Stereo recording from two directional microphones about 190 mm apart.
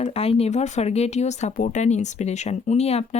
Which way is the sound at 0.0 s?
30° left (ahead or behind).